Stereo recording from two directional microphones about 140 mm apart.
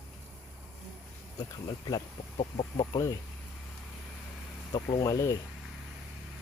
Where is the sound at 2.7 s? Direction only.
30° left (ahead or behind).